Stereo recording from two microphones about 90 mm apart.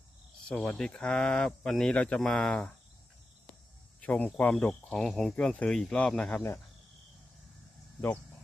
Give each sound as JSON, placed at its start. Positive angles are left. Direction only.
{"t": 0.4, "sound": "speech", "side_deg": 15}
{"t": 4.0, "sound": "speech", "side_deg": 15}
{"t": 4.9, "sound": "speech", "side_deg": 5}